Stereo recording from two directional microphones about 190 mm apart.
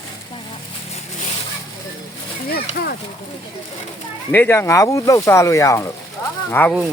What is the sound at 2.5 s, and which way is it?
Speech, 55° left (ahead or behind).